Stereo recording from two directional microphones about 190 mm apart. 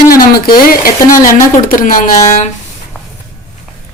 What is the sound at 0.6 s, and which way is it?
Speech, 50° left (ahead or behind).